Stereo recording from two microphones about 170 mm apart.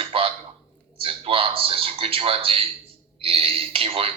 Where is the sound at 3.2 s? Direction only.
35° right (ahead or behind).